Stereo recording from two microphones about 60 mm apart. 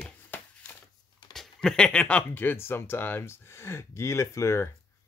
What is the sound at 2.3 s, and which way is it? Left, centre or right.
Speech, left.